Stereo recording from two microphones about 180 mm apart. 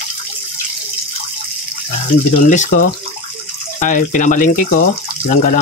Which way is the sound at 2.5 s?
45° left (ahead or behind).